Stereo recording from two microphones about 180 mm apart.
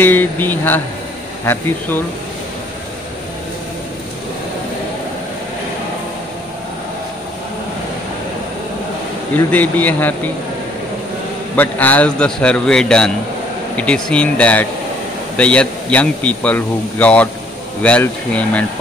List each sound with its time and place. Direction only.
0.0 s a man's voice: 10° left (ahead or behind)
9.5 s a man's voice: 10° left (ahead or behind)
11.5 s a man's voice: 10° left (ahead or behind)